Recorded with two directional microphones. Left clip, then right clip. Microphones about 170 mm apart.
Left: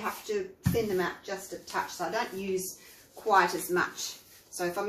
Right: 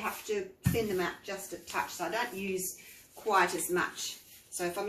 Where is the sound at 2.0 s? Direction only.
25° right (ahead or behind).